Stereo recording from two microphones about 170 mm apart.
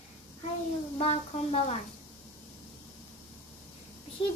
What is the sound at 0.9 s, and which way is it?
Speech, 35° left (ahead or behind).